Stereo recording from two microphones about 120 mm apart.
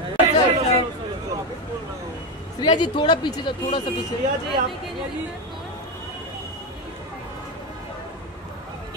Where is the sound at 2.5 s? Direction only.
35° left (ahead or behind).